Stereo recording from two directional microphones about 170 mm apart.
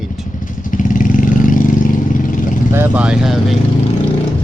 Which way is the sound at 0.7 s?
50° left (ahead or behind).